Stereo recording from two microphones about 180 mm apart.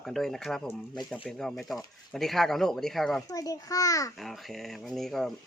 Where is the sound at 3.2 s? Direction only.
20° left (ahead or behind).